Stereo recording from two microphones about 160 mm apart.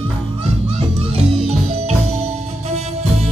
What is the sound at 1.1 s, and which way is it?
Music, 40° right (ahead or behind).